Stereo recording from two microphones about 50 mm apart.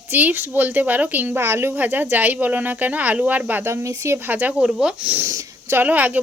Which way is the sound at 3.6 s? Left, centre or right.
Right.